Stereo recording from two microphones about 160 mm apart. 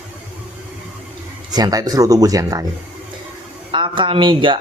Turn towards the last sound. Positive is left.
turn(degrees=-30)  # may be behind; listen again after turning